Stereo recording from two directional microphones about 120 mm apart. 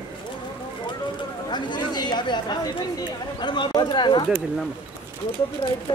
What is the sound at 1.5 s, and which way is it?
Chatter, 35° left (ahead or behind).